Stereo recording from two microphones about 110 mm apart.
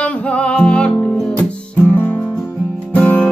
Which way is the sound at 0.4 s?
10° left (ahead or behind).